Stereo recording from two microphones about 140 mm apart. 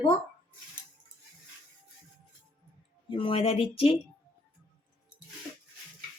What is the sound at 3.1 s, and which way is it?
Speech, 40° left (ahead or behind).